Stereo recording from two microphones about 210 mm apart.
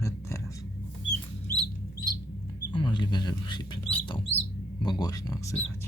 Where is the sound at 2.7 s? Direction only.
25° left (ahead or behind).